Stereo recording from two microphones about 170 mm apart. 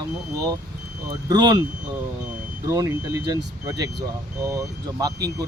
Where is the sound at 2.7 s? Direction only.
20° right (ahead or behind).